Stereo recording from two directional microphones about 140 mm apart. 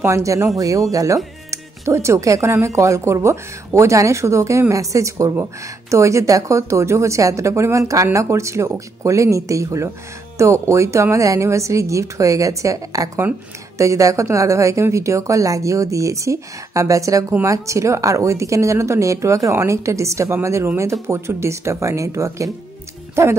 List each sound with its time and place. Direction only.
0.0 s speech: 20° right (ahead or behind)